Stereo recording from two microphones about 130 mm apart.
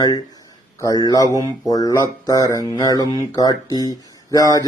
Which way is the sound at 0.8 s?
30° left (ahead or behind).